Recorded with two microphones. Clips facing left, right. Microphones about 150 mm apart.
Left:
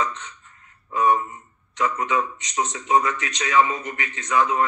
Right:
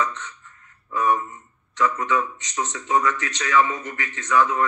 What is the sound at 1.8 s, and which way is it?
A man's voice, 20° left (ahead or behind).